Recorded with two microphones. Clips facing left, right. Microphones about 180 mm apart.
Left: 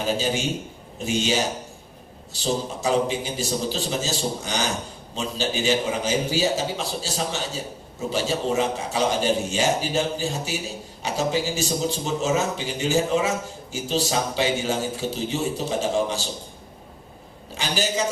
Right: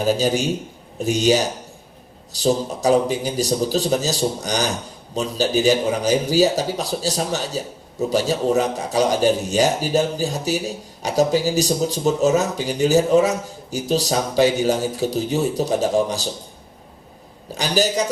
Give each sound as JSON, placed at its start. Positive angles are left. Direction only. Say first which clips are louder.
{"t": 0.0, "sound": "speech", "louder": "right 5 dB", "side_deg": -40}
{"t": 2.4, "sound": "speech", "louder": "right 6 dB", "side_deg": -40}